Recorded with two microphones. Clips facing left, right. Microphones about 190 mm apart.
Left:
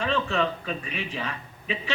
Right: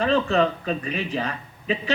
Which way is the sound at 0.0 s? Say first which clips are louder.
Right 6 dB; 35° right (ahead or behind).